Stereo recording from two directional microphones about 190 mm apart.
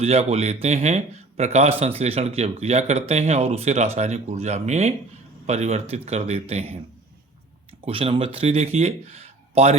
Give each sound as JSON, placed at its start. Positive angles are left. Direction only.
{"t": 0.0, "sound": "speech", "side_deg": -35}
{"t": 7.9, "sound": "speech", "side_deg": -30}